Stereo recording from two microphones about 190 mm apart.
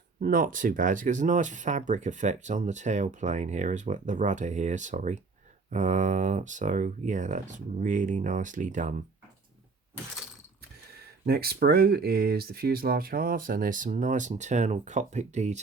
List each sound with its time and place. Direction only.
0.2 s speech: 45° right (ahead or behind)
11.3 s speech: 55° right (ahead or behind); by 15.6 s 35° right (ahead or behind)